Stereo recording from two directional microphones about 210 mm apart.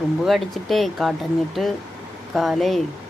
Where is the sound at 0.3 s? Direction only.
Centre (ahead or behind).